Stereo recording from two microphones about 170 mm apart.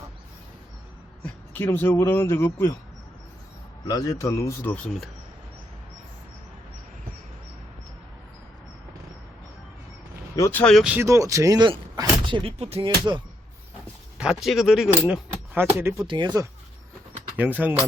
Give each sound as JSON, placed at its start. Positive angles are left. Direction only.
{"t": 1.2, "sound": "a man's voice", "side_deg": 10}
{"t": 3.8, "sound": "a man's voice", "side_deg": 20}
{"t": 10.3, "sound": "a man's voice", "side_deg": 15}
{"t": 10.8, "sound": "speech", "side_deg": -5}
{"t": 11.0, "sound": "speech", "side_deg": -20}
{"t": 14.2, "sound": "speech", "side_deg": -5}
{"t": 16.0, "sound": "speech", "side_deg": -25}
{"t": 17.3, "sound": "speech", "side_deg": -10}